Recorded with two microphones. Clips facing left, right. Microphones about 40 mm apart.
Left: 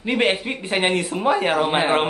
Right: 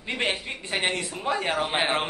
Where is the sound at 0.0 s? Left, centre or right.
Left.